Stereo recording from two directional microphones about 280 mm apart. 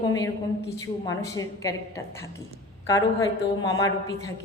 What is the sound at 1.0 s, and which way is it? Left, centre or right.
Speech, centre.